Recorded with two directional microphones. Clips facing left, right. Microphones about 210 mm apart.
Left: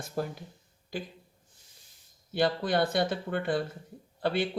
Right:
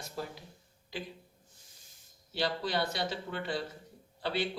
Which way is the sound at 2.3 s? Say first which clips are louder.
Left 6 dB; 55° left (ahead or behind).